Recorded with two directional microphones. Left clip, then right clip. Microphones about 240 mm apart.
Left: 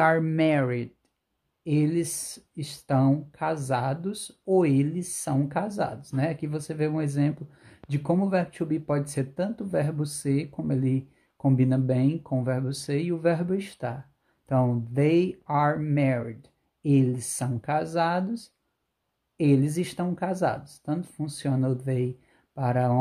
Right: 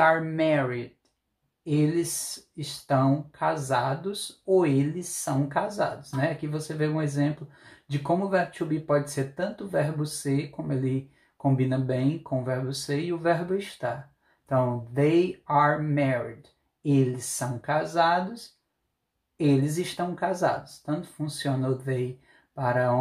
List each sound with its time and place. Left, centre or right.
0.0 s speech: left
8.3 s speech: left
11.4 s speech: left
17.4 s speech: left